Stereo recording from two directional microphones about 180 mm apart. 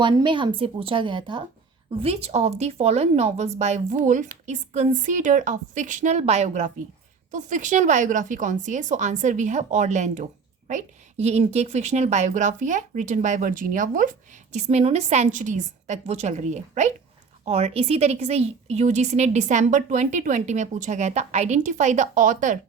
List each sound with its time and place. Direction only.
0.0 s a woman's voice: 25° right (ahead or behind); by 22.5 s 45° right (ahead or behind)